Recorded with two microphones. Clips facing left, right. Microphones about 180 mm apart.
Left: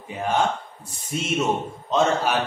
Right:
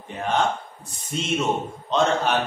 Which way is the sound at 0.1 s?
5° left (ahead or behind).